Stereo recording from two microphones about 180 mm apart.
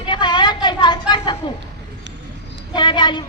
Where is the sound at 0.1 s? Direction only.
25° left (ahead or behind).